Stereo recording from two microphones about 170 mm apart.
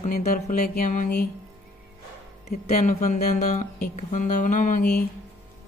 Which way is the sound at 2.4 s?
40° left (ahead or behind).